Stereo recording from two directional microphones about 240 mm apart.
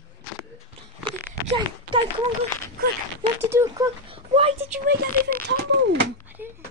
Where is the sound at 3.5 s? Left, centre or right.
Centre.